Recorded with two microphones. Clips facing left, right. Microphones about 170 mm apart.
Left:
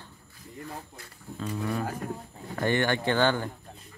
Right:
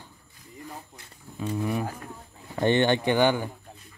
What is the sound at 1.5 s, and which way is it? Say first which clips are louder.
Speech: right 2 dB; 15° right (ahead or behind).